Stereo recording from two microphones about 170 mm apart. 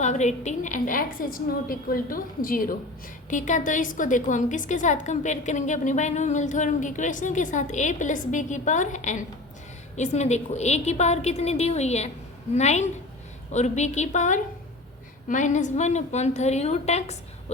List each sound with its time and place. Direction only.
0.0 s a woman's voice: 45° left (ahead or behind)